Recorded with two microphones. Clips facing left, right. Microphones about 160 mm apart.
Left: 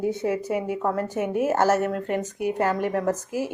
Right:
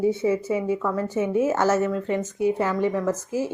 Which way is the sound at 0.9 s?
60° left (ahead or behind).